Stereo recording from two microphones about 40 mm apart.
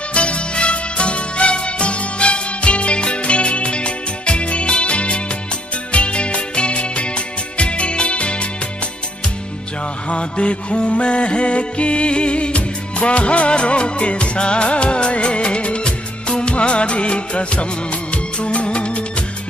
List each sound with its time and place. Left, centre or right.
0.1 s music: left
10.0 s music: left